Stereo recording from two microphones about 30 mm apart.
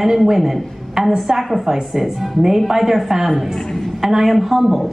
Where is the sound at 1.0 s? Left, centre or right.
Centre.